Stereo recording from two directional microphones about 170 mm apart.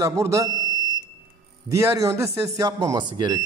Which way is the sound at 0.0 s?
20° right (ahead or behind).